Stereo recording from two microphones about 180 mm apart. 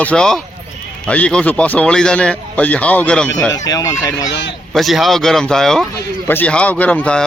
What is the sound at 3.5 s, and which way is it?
Speech, 20° left (ahead or behind).